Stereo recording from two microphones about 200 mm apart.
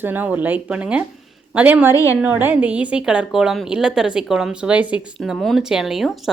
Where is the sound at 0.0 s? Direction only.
10° right (ahead or behind).